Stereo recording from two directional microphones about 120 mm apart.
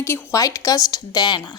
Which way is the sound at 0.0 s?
20° left (ahead or behind).